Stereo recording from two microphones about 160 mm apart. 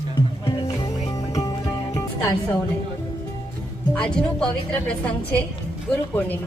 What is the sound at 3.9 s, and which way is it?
A woman's voice, 5° left (ahead or behind).